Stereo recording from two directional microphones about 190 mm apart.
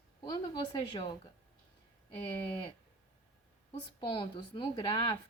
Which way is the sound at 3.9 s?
25° left (ahead or behind).